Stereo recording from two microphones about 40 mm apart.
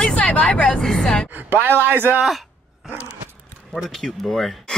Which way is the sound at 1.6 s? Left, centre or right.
Right.